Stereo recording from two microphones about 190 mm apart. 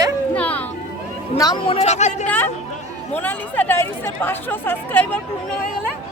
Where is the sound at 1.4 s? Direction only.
25° left (ahead or behind).